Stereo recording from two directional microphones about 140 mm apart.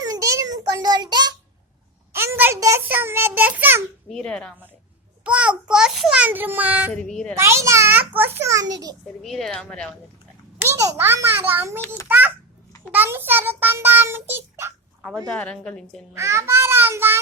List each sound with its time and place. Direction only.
0.0 s child singing: 25° right (ahead or behind)
2.1 s a sound: 15° right (ahead or behind)
4.1 s a woman's voice: 5° left (ahead or behind)
5.2 s a child's voice: 10° right (ahead or behind)
6.9 s a woman's voice: 5° left (ahead or behind)
7.3 s a child's voice: 20° right (ahead or behind)
9.2 s a woman's voice: 5° left (ahead or behind)
10.6 s a child's voice: 20° right (ahead or behind)
12.0 s a sound: 10° right (ahead or behind)
12.9 s child singing: 15° right (ahead or behind)
15.3 s a woman's voice: 10° left (ahead or behind)
16.1 s a child's voice: 20° right (ahead or behind)